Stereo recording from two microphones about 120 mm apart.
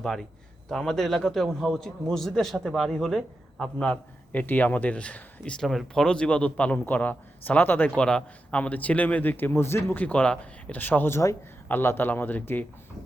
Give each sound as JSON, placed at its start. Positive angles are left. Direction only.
{"t": 0.0, "sound": "a man's voice", "side_deg": 0}